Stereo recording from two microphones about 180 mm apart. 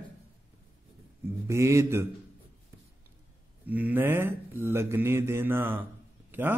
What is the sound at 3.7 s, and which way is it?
Speech, 10° right (ahead or behind).